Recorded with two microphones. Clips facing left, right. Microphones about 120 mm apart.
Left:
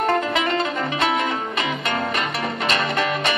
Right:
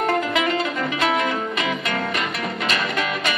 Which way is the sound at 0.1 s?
30° left (ahead or behind).